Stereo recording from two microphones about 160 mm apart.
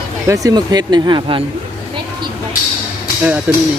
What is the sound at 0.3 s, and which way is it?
Speech, 20° right (ahead or behind).